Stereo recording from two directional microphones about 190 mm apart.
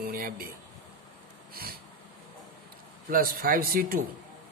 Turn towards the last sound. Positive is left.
turn(degrees=-50)  # may be behind; listen again after turning